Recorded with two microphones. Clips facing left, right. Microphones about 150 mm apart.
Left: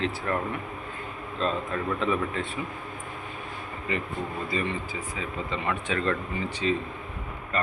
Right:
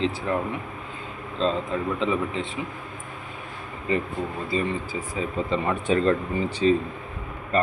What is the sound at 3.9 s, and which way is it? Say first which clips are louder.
A man's voice: right 5 dB; 35° right (ahead or behind).